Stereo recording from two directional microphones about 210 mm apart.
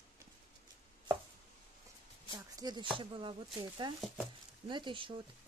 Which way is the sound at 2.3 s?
20° right (ahead or behind).